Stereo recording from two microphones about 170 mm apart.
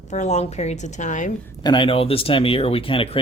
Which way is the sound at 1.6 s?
30° left (ahead or behind).